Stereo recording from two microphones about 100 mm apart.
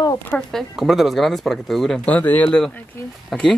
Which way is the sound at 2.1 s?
15° left (ahead or behind).